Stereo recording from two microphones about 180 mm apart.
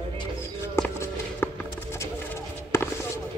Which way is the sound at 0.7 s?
10° left (ahead or behind).